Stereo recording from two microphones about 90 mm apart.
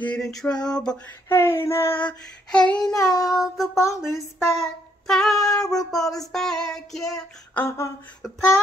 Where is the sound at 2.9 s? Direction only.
35° left (ahead or behind).